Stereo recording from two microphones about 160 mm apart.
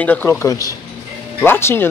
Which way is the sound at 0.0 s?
10° left (ahead or behind).